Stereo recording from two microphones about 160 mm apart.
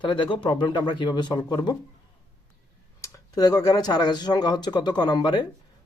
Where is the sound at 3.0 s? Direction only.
20° left (ahead or behind).